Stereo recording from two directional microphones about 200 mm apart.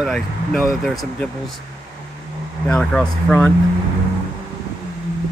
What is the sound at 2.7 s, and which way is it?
Speech, 5° left (ahead or behind).